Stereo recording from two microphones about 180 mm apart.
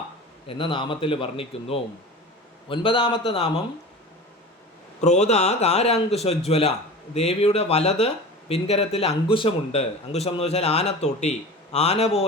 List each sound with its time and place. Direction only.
0.4 s a man's voice: 30° left (ahead or behind)
4.9 s speech: 40° left (ahead or behind)